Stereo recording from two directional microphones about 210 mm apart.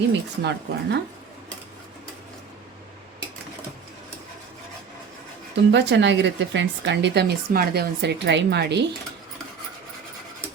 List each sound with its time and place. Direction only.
0.1 s speech: 55° right (ahead or behind)
5.7 s speech: 55° right (ahead or behind)